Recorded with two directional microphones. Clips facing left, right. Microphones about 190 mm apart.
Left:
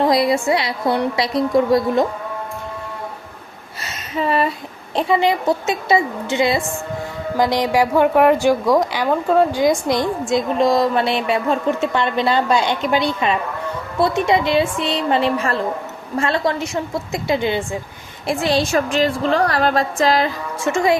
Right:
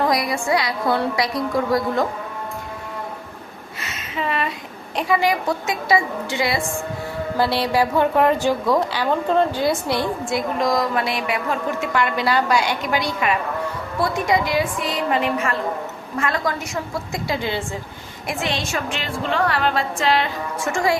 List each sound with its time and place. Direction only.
0.0 s a woman's voice: 25° left (ahead or behind)
3.8 s a sound: 40° left (ahead or behind)
4.9 s a woman's voice: 25° left (ahead or behind)
18.3 s a woman's voice: 35° left (ahead or behind)
20.7 s a woman's voice: 20° left (ahead or behind)